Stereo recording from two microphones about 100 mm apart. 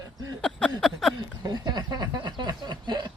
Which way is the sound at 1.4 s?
45° right (ahead or behind).